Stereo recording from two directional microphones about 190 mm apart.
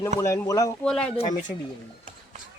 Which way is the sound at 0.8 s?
5° left (ahead or behind).